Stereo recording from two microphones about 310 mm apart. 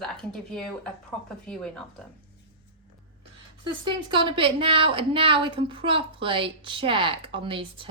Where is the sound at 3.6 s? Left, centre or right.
Centre.